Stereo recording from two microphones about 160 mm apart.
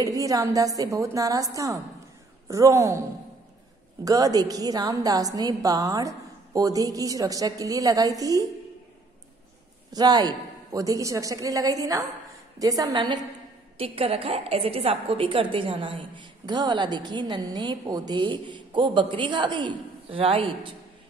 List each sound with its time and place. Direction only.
0.0 s a woman's voice: 20° right (ahead or behind)
4.0 s a woman's voice: 20° right (ahead or behind)
9.9 s a woman's voice: 25° right (ahead or behind)